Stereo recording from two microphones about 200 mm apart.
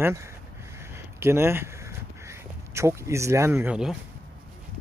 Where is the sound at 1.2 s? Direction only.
10° right (ahead or behind).